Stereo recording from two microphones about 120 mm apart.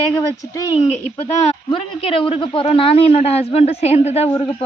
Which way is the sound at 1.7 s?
50° left (ahead or behind).